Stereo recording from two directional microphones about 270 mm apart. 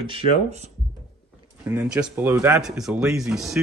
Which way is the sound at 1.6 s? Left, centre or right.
Centre.